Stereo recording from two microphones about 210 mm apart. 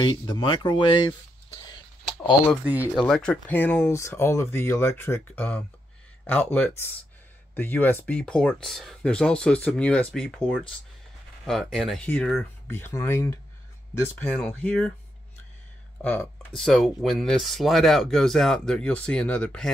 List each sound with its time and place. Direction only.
0.0 s speech: 20° left (ahead or behind)
2.6 s speech: 5° right (ahead or behind)
3.1 s speech: 5° left (ahead or behind)
16.0 s speech: 5° left (ahead or behind)